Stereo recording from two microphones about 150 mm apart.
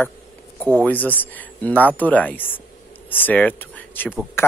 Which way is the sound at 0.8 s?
10° left (ahead or behind).